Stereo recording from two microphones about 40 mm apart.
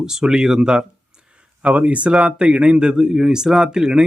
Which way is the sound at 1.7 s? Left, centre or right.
Right.